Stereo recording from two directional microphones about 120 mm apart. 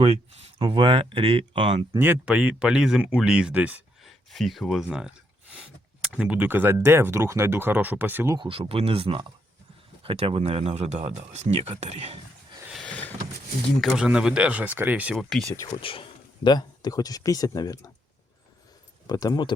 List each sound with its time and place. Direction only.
0.0 s speech: 60° right (ahead or behind)
0.6 s speech: 45° right (ahead or behind)
2.0 s speech: 15° right (ahead or behind)
4.0 s speech: centre (ahead or behind); by 8.4 s 20° right (ahead or behind)
8.4 s speech: 50° right (ahead or behind)
12.7 s vehicle: 10° left (ahead or behind)
13.8 s speech: 5° right (ahead or behind)
15.1 s speech: 5° left (ahead or behind)
15.6 s speech: 50° left (ahead or behind); by 17.9 s 30° left (ahead or behind)
19.0 s speech: 30° left (ahead or behind)